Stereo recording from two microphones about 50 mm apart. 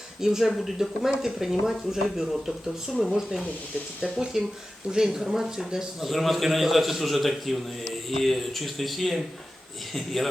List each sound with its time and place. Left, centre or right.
0.2 s a man's voice: centre